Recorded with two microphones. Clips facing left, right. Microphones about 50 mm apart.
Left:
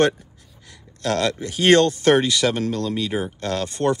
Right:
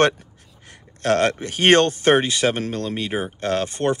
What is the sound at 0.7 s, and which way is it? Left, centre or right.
Speech, right.